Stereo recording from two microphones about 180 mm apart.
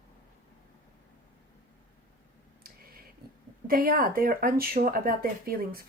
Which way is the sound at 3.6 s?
55° right (ahead or behind).